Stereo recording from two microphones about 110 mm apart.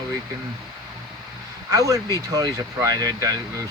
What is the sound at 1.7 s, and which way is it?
Speech, 30° right (ahead or behind).